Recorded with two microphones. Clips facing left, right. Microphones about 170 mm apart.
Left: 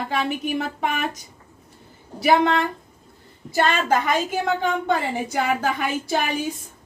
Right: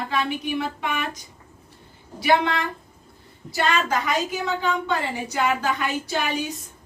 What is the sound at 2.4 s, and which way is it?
A woman's voice, 45° left (ahead or behind).